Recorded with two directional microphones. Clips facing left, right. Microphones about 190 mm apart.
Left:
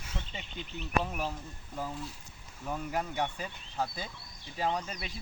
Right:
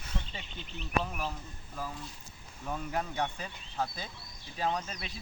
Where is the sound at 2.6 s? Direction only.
5° left (ahead or behind).